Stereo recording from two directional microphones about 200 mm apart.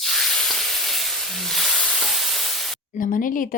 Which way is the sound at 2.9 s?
45° left (ahead or behind).